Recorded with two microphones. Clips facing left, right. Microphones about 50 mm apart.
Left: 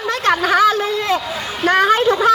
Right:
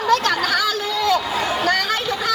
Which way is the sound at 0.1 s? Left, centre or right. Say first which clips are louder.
Left 3 dB; left.